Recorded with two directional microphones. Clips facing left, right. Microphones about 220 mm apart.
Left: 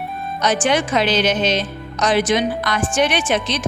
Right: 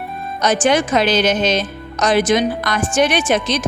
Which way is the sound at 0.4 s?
45° right (ahead or behind).